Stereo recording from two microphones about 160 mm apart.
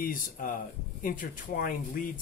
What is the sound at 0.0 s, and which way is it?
Speech, 60° left (ahead or behind).